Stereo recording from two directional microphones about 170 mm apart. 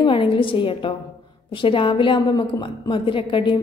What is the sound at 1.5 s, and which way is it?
A woman's voice, 30° left (ahead or behind).